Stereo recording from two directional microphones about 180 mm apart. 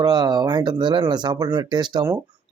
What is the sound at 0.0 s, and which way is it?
A man's voice, 20° right (ahead or behind).